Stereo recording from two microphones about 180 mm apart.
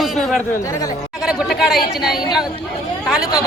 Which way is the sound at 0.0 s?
Centre (ahead or behind).